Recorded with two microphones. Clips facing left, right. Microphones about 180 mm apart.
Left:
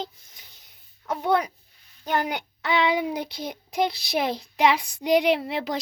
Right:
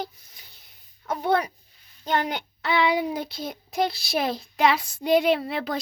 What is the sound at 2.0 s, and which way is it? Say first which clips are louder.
Child singing: even; 10° left (ahead or behind).